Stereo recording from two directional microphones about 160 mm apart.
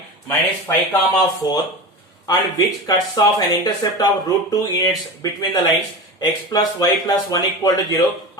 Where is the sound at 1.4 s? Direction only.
25° left (ahead or behind).